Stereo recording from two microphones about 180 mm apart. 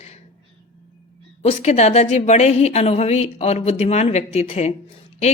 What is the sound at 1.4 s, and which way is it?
A woman's voice, 35° left (ahead or behind).